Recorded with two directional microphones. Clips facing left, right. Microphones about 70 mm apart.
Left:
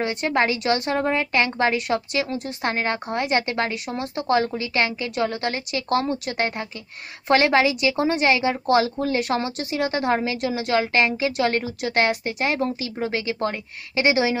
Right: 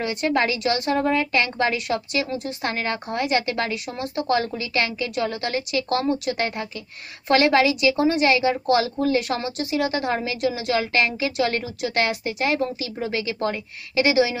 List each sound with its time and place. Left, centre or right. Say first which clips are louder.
0.0 s a woman's voice: even; left